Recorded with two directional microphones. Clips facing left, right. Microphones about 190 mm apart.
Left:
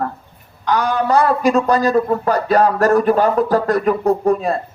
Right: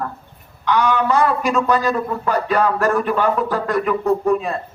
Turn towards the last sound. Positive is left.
turn(degrees=40)  # may be behind; listen again after turning